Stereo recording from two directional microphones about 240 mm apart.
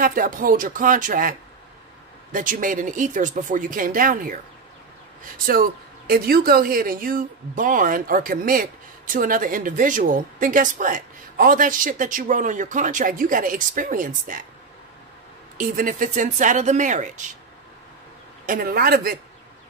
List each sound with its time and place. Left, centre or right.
0.0 s speech: right
2.3 s speech: right
15.5 s speech: right
18.4 s speech: right